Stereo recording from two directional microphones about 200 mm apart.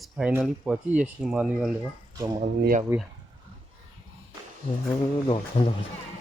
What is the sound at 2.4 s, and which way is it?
Speech, 40° right (ahead or behind).